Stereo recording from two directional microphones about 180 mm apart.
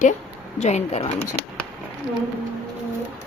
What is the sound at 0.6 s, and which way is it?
Speech, 35° left (ahead or behind).